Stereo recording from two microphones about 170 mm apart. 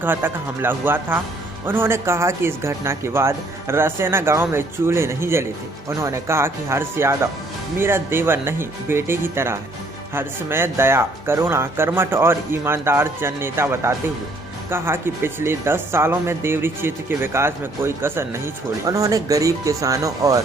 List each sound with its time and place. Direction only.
0.0 s speech: 10° right (ahead or behind)